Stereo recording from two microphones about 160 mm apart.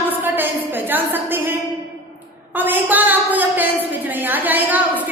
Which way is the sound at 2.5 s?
10° right (ahead or behind).